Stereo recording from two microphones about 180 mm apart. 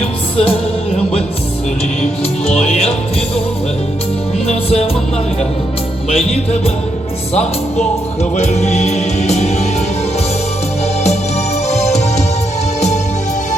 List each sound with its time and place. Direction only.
0.0 s music: 30° left (ahead or behind)
2.5 s music: 35° left (ahead or behind)
4.4 s music: 35° left (ahead or behind)
6.1 s music: 35° left (ahead or behind)
11.7 s music: 40° left (ahead or behind)